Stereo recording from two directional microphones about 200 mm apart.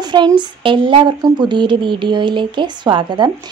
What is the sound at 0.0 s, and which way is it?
Speech, 20° right (ahead or behind).